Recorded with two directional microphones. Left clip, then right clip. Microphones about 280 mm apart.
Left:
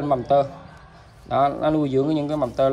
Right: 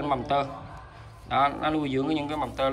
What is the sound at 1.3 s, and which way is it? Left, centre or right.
Speech, centre.